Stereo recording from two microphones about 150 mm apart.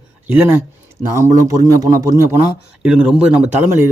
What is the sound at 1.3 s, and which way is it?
Speech, 25° right (ahead or behind).